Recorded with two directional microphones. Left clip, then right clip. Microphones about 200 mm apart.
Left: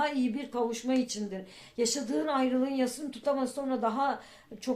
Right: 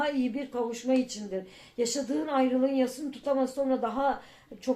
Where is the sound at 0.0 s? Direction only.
40° left (ahead or behind).